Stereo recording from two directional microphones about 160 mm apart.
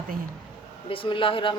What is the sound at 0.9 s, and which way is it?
Speech, 35° left (ahead or behind).